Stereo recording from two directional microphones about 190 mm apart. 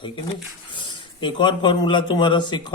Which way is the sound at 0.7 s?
25° left (ahead or behind).